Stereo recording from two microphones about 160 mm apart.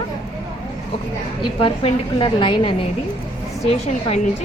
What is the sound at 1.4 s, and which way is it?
A woman's voice, 30° left (ahead or behind).